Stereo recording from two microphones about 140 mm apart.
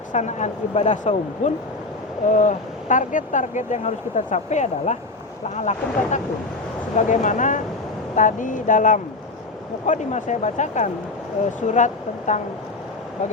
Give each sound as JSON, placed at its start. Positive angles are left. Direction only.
{"t": 0.1, "sound": "speech", "side_deg": 60}